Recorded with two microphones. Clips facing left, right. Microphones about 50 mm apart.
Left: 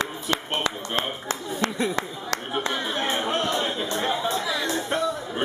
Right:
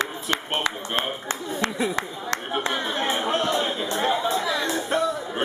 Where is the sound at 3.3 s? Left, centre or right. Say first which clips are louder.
Right 2 dB; centre.